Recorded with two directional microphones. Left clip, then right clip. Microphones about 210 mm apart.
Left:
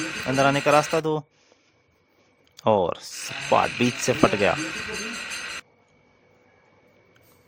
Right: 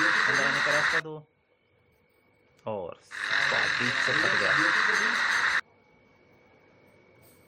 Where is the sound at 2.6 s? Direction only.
60° left (ahead or behind).